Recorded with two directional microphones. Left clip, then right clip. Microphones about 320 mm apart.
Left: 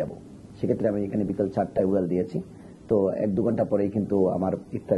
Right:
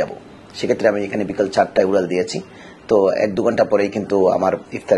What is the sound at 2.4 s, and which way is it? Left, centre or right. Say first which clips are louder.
Speech: right 6 dB; right.